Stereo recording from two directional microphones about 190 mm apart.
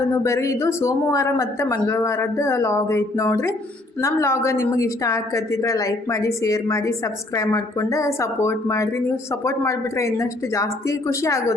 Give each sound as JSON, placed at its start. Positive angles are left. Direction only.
{"t": 0.0, "sound": "a woman's voice", "side_deg": 15}